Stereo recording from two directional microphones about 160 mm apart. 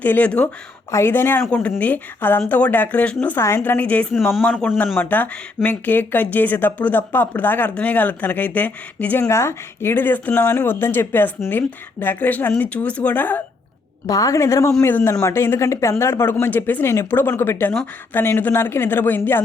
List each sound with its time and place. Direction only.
0.0 s speech: 10° left (ahead or behind)
4.9 s speech: 10° left (ahead or behind)